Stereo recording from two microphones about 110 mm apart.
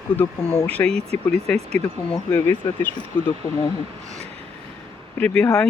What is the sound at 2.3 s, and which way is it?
Speech, 20° left (ahead or behind).